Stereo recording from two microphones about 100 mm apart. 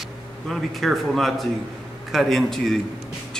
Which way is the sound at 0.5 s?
Centre (ahead or behind).